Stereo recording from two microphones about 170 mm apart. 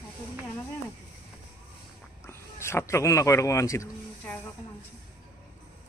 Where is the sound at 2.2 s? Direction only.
15° left (ahead or behind).